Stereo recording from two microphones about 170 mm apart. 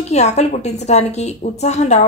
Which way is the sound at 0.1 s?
40° left (ahead or behind).